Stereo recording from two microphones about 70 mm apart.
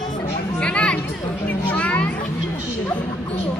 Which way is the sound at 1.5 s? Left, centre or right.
Centre.